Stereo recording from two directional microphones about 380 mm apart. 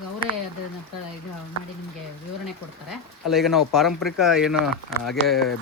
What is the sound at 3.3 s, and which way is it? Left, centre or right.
Speech, centre.